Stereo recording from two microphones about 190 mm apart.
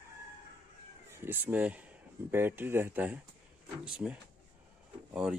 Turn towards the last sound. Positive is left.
turn(degrees=-5)  # may be behind; listen again after turning